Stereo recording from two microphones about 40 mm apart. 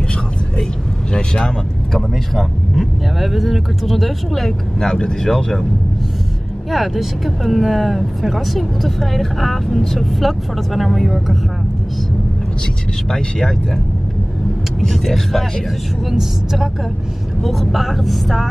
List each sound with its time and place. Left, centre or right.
1.1 s speech: left
2.0 s speech: centre
3.2 s speech: centre
4.7 s speech: centre
6.7 s speech: centre
13.1 s speech: centre
14.8 s speech: centre
16.1 s speech: centre